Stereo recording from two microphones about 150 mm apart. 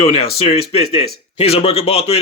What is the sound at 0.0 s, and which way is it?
Speech, 40° left (ahead or behind).